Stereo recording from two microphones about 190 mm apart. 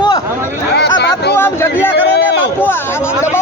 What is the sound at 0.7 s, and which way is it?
Chatter, 60° left (ahead or behind).